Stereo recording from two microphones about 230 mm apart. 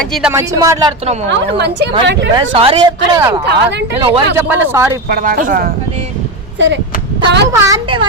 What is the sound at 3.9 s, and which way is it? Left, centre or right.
Speech, right.